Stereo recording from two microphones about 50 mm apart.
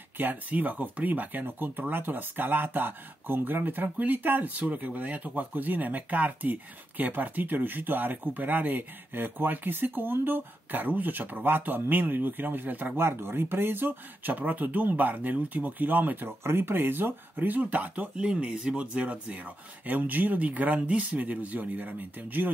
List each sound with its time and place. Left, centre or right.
0.2 s speech: right
12.9 s speech: right
16.3 s speech: right